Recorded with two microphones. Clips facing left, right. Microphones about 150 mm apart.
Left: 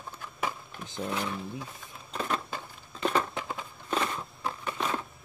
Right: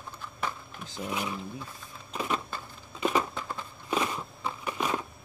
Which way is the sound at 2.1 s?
5° right (ahead or behind).